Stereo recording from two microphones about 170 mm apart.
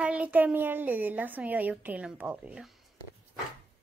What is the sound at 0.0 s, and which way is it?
A woman's voice, 10° right (ahead or behind).